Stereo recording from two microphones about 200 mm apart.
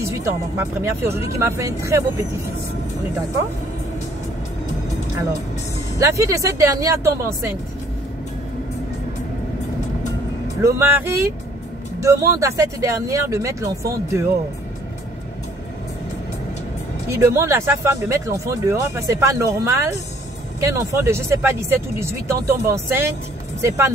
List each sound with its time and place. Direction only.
0.0 s speech: 15° right (ahead or behind)
5.9 s speech: 15° right (ahead or behind)
10.6 s speech: 10° right (ahead or behind)
17.1 s speech: 15° right (ahead or behind)